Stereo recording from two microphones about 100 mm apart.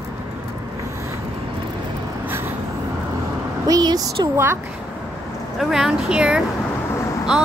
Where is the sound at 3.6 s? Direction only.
40° right (ahead or behind).